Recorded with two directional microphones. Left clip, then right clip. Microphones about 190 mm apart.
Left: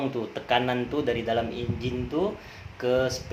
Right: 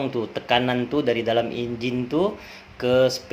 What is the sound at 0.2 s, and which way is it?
A man's voice, 25° right (ahead or behind).